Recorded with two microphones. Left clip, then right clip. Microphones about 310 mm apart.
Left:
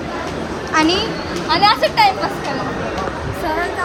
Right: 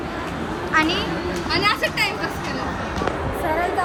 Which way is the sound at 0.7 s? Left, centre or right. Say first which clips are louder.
Left 4 dB; centre.